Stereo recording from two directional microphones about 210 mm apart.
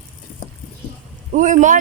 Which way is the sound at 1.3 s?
35° right (ahead or behind).